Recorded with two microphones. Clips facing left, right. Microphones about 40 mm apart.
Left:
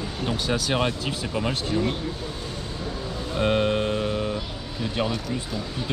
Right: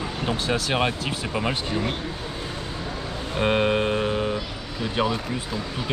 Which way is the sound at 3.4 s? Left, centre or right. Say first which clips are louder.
Right 1 dB; centre.